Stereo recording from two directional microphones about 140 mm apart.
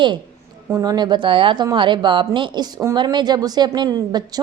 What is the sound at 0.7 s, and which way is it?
A woman's voice, 25° right (ahead or behind).